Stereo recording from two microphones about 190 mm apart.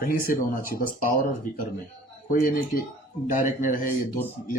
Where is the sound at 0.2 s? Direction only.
50° left (ahead or behind).